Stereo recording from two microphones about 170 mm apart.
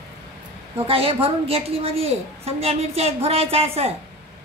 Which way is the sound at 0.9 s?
35° right (ahead or behind).